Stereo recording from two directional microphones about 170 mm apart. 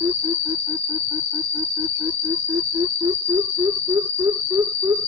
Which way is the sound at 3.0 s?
20° right (ahead or behind).